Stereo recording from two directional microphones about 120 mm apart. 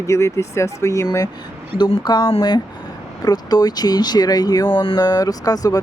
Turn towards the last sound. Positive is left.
turn(degrees=30)  # may be behind; listen again after turning